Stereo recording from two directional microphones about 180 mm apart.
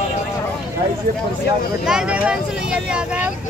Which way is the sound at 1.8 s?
5° right (ahead or behind).